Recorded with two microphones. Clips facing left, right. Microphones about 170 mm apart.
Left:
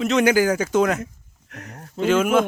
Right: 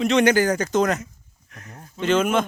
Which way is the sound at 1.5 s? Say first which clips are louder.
Left 4 dB; 65° left (ahead or behind).